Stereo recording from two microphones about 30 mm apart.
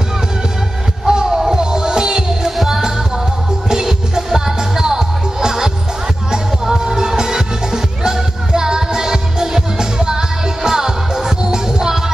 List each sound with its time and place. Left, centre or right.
1.0 s music: centre
2.5 s music: centre
3.7 s music: centre